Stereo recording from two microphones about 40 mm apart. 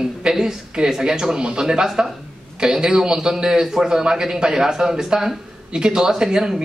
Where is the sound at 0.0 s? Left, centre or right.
Centre.